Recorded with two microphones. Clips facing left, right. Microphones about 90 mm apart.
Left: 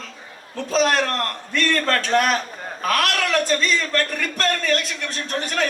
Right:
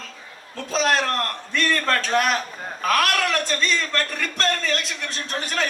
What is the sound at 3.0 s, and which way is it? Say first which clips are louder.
A man's voice: left 2 dB; 35° right (ahead or behind).